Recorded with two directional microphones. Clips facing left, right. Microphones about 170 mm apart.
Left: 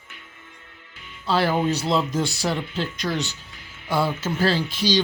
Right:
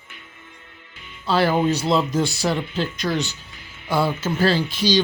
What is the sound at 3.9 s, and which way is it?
Speech, 90° right.